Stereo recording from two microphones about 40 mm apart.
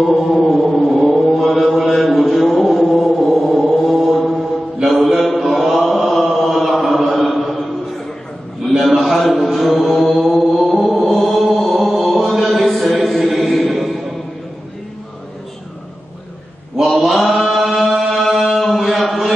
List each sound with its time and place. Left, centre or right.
0.0 s chant: centre
9.0 s chant: centre
13.0 s a sound: centre
13.4 s chant: centre
16.8 s chant: centre